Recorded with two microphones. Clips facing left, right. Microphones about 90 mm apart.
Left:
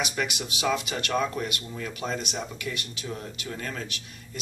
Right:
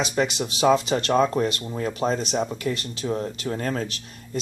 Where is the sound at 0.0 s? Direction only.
30° right (ahead or behind).